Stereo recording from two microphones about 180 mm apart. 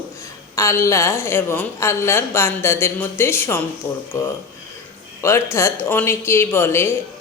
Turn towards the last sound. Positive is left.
turn(degrees=15)  # may be behind; listen again after turning